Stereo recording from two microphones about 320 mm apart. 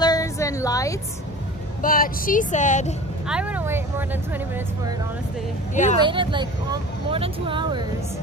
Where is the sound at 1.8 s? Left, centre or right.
Left.